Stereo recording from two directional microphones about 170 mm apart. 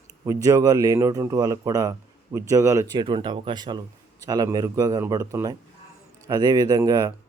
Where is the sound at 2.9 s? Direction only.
25° right (ahead or behind).